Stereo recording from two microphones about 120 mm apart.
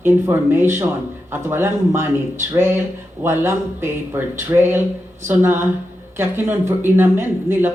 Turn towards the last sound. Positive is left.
turn(degrees=-15)  # may be behind; listen again after turning